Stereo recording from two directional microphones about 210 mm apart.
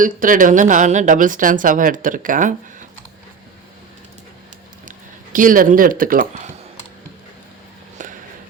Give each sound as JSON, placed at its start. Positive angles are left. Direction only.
{"t": 0.0, "sound": "speech", "side_deg": -40}
{"t": 4.9, "sound": "speech", "side_deg": -40}